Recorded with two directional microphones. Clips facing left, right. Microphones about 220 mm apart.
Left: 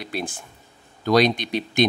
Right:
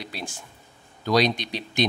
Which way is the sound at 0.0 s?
55° left (ahead or behind).